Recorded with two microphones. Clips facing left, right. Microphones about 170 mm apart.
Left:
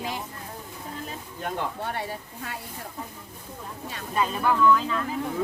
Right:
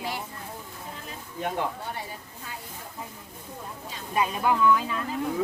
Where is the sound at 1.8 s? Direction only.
65° left (ahead or behind).